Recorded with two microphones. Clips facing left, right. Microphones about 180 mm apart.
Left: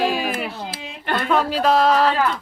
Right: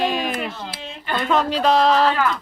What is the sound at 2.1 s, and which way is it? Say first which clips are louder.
Speech: even; 30° left (ahead or behind).